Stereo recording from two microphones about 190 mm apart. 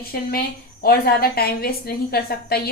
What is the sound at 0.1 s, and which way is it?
A woman's voice, 50° left (ahead or behind).